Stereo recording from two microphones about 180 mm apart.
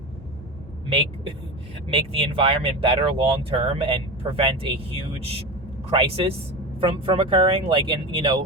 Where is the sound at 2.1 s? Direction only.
30° right (ahead or behind).